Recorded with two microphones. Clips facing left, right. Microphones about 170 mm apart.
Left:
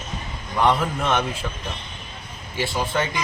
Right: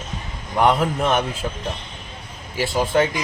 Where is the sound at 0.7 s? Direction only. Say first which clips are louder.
Right 2 dB; 40° right (ahead or behind).